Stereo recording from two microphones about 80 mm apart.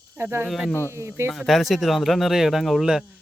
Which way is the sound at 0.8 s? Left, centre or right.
Right.